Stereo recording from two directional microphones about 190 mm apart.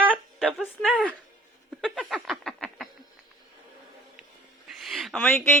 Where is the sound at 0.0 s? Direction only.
10° right (ahead or behind).